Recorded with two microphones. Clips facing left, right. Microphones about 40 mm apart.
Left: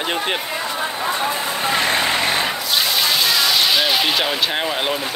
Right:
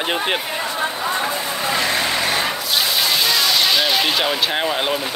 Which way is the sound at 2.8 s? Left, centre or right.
Centre.